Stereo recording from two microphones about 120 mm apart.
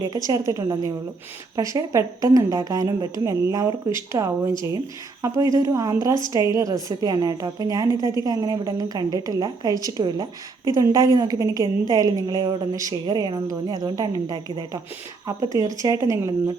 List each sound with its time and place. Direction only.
0.3 s a woman's voice: 30° right (ahead or behind)